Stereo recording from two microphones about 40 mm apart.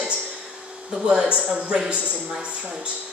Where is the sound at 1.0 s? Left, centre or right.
Right.